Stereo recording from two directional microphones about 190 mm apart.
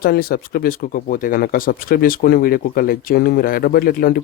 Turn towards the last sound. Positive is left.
turn(degrees=50)  # may be behind; listen again after turning